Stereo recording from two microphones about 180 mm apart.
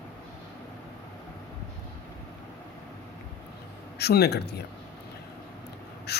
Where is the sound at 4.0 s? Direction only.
65° left (ahead or behind).